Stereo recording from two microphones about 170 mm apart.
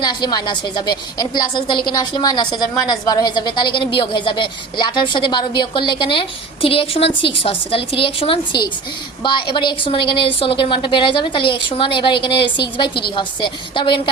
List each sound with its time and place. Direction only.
0.0 s a woman's voice: 25° left (ahead or behind)